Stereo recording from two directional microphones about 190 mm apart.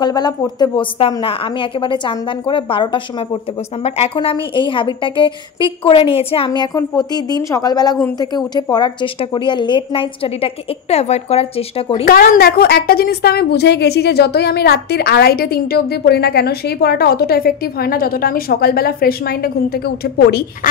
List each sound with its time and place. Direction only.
0.0 s a woman's voice: 20° left (ahead or behind)
12.1 s a woman's voice: 50° left (ahead or behind)